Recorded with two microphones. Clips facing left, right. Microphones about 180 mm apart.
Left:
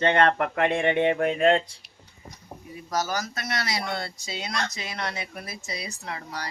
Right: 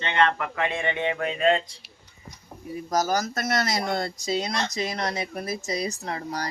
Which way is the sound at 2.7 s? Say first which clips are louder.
Right 4 dB; 40° right (ahead or behind).